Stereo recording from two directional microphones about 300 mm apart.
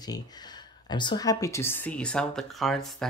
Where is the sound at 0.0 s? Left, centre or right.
Centre.